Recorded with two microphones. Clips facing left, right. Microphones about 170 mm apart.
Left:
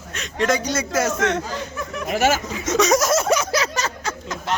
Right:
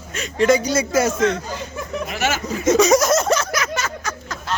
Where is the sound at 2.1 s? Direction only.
45° left (ahead or behind).